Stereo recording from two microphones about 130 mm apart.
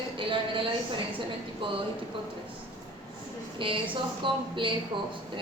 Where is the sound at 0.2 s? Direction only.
40° right (ahead or behind).